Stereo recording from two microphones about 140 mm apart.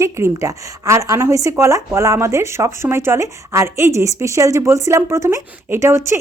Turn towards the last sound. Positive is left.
turn(degrees=-20)  # may be behind; listen again after turning